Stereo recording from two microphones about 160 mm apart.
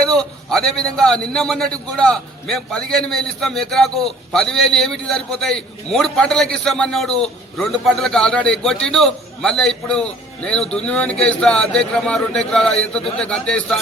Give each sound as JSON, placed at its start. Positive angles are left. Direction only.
{"t": 0.0, "sound": "a man's voice", "side_deg": 5}